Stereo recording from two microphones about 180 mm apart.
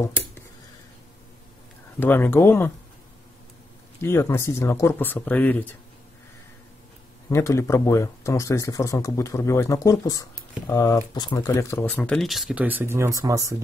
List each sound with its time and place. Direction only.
2.0 s speech: 10° left (ahead or behind)
4.0 s speech: 15° left (ahead or behind)
7.2 s speech: 15° left (ahead or behind); by 13.6 s 20° right (ahead or behind)